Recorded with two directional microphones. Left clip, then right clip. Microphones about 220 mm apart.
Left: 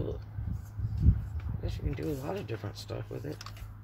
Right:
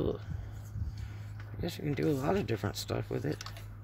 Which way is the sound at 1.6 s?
50° right (ahead or behind).